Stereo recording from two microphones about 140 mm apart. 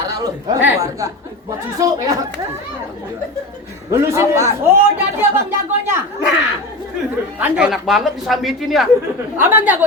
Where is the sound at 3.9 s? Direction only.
20° right (ahead or behind).